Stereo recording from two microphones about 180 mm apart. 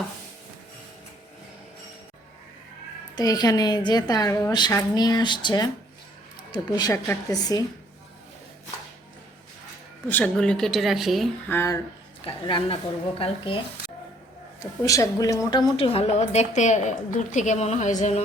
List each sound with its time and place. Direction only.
3.2 s a woman's voice: 20° left (ahead or behind)
6.7 s a woman's voice: 20° left (ahead or behind)
10.1 s a woman's voice: 5° left (ahead or behind)
11.4 s speech: 15° left (ahead or behind)
12.2 s a woman's voice: 30° left (ahead or behind)
14.6 s a woman's voice: 15° left (ahead or behind); by 18.2 s 40° left (ahead or behind)